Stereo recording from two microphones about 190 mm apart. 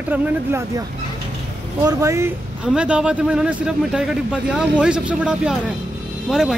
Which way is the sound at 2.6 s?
5° right (ahead or behind).